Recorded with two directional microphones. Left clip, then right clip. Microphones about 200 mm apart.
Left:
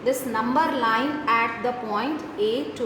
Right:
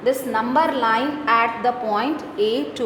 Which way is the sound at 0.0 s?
35° right (ahead or behind).